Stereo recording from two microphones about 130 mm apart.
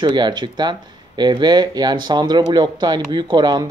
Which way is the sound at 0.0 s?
35° right (ahead or behind).